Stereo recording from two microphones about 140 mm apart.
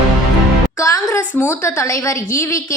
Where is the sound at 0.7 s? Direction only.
20° left (ahead or behind).